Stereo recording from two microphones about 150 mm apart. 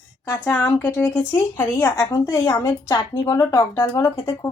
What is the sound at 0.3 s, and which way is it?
Speech, 10° left (ahead or behind).